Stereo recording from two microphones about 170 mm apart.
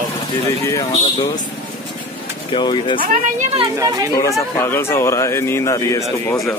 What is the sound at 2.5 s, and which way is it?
Speech, 30° left (ahead or behind).